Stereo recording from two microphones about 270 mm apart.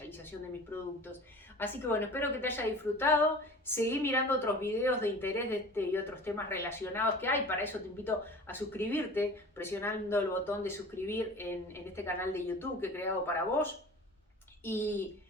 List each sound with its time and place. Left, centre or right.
0.0 s a woman's voice: centre